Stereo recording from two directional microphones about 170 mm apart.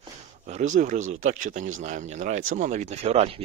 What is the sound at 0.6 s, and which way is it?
Speech, 45° right (ahead or behind).